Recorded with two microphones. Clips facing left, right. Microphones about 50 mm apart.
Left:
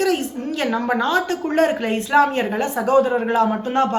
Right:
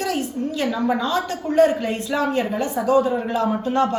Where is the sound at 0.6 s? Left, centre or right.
Left.